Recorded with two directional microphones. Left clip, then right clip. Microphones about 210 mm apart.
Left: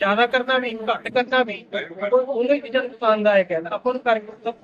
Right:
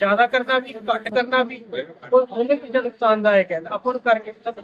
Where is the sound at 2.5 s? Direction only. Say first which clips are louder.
Even; 20° left (ahead or behind).